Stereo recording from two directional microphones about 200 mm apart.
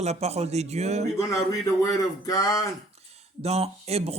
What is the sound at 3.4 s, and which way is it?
Speech, 30° right (ahead or behind).